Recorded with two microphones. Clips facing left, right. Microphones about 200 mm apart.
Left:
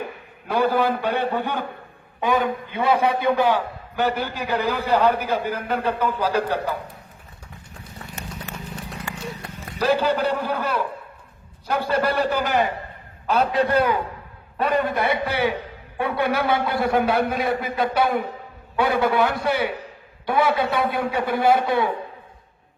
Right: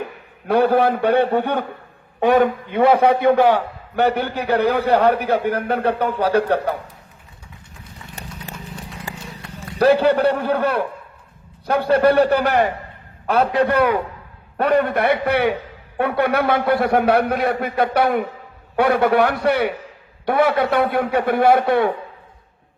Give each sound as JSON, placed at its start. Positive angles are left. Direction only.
{"t": 0.4, "sound": "a man's voice", "side_deg": -60}
{"t": 8.2, "sound": "horse", "side_deg": -35}
{"t": 9.7, "sound": "a man's voice", "side_deg": -60}